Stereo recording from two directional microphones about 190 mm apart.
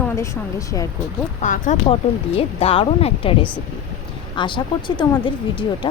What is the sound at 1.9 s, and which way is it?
Speech, 30° left (ahead or behind).